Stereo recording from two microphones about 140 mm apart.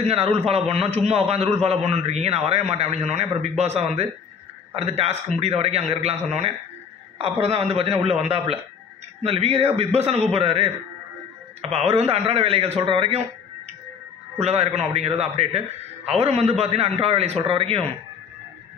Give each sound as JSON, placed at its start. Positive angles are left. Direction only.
{"t": 0.0, "sound": "a man's voice", "side_deg": -45}
{"t": 14.4, "sound": "a man's voice", "side_deg": -50}